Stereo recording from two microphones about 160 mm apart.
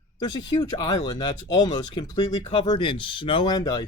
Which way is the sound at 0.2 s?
25° left (ahead or behind).